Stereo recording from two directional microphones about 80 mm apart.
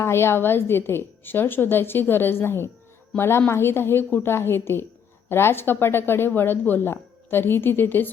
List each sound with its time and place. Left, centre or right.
0.0 s a woman's voice: left